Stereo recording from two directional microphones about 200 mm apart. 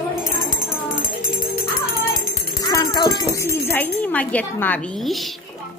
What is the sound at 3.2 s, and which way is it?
A woman's voice, 15° left (ahead or behind).